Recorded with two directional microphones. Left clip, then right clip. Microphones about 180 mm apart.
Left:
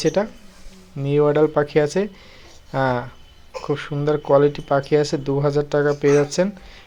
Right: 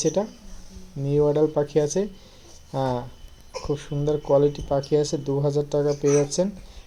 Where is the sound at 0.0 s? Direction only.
5° right (ahead or behind).